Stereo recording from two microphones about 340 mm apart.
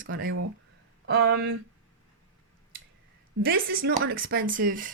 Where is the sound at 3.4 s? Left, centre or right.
Right.